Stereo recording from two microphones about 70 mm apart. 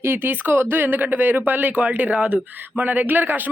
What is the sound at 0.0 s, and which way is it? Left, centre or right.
Speech, right.